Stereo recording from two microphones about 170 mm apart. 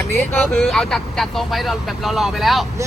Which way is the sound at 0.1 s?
5° left (ahead or behind).